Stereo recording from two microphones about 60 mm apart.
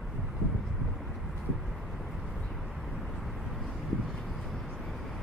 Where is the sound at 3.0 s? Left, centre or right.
Centre.